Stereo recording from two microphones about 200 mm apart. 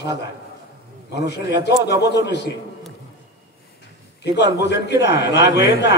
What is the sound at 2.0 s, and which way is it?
Speech, 55° left (ahead or behind).